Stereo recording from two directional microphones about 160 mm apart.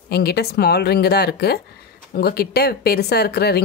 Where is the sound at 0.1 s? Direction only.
90° left.